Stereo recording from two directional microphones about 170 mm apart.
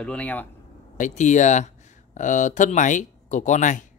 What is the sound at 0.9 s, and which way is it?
Speech, 45° left (ahead or behind).